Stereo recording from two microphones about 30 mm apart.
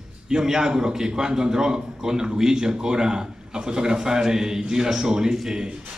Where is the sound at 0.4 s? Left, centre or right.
Centre.